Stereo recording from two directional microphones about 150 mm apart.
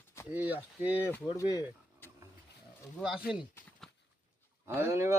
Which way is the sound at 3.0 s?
5° right (ahead or behind).